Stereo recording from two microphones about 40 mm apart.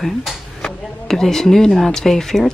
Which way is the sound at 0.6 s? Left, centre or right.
Centre.